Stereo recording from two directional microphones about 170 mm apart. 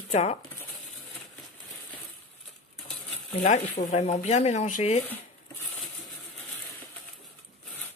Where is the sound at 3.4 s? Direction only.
45° left (ahead or behind).